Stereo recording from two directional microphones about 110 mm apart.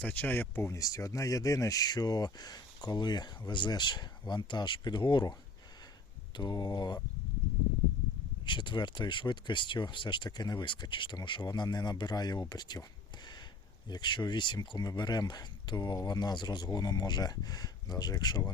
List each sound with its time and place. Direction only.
0.0 s speech: 15° left (ahead or behind); by 5.3 s 45° left (ahead or behind)
6.3 s speech: 40° left (ahead or behind)
8.4 s speech: 45° left (ahead or behind)
13.8 s speech: 40° left (ahead or behind)